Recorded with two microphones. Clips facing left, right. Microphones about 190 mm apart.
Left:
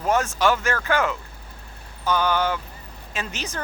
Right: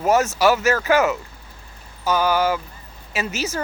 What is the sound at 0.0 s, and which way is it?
Speech, 5° right (ahead or behind).